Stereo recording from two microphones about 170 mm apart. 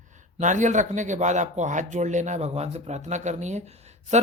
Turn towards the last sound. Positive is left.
turn(degrees=-40)  # may be behind; listen again after turning